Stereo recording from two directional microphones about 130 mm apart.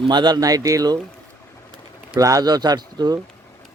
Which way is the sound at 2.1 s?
25° right (ahead or behind).